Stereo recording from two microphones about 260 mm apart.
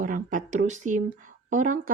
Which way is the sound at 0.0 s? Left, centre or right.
Right.